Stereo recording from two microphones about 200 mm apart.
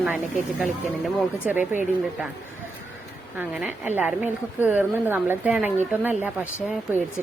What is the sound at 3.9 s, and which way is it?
A woman's voice, 10° right (ahead or behind).